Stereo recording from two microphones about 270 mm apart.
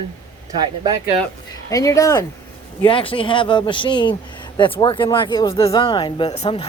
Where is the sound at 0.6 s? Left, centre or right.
Centre.